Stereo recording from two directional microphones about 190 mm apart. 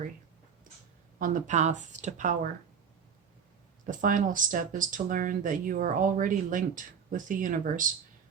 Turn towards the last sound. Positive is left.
turn(degrees=-45)  # may be behind; listen again after turning